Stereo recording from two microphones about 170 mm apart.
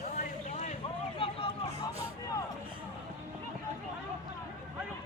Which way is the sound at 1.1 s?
30° left (ahead or behind).